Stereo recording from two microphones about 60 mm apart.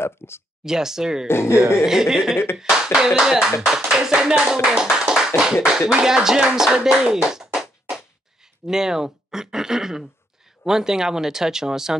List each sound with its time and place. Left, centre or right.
0.0 s speech: left
0.7 s speech: centre
1.2 s speech: left
1.9 s speech: centre
8.6 s speech: centre